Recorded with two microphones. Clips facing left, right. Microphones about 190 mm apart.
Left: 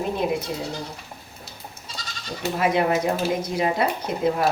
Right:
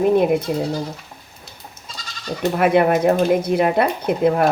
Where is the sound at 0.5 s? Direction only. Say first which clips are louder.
Right 8 dB; 55° right (ahead or behind).